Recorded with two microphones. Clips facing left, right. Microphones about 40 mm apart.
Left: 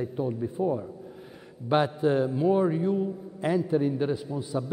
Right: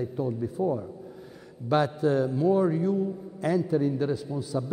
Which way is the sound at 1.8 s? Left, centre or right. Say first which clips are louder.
Even; left.